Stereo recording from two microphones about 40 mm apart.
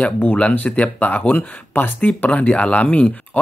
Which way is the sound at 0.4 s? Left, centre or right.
Left.